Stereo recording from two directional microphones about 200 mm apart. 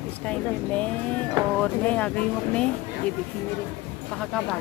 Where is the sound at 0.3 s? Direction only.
5° left (ahead or behind).